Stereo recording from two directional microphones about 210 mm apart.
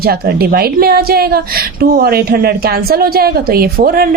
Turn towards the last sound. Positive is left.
turn(degrees=-45)  # may be behind; listen again after turning